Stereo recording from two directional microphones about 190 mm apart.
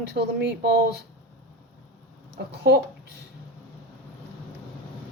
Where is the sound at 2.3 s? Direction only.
60° right (ahead or behind).